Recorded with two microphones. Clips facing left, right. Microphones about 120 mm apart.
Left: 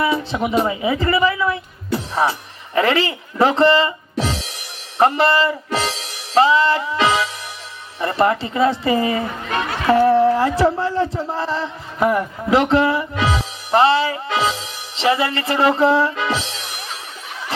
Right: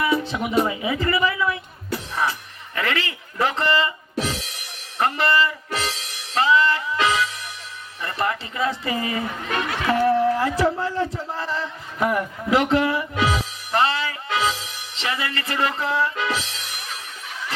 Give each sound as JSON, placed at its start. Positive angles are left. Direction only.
{"t": 0.0, "sound": "speech", "side_deg": 30}
{"t": 1.9, "sound": "music", "side_deg": 30}
{"t": 2.7, "sound": "a man's voice", "side_deg": 30}